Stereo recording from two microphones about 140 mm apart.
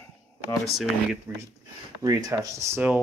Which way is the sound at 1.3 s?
15° right (ahead or behind).